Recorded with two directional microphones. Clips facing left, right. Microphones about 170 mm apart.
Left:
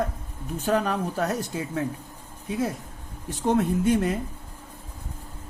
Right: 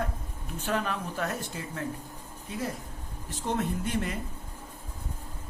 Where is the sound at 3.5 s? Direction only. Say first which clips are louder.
Left 9 dB; 45° left (ahead or behind).